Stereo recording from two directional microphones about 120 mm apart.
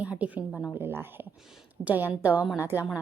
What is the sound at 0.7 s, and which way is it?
A woman's voice, 20° right (ahead or behind).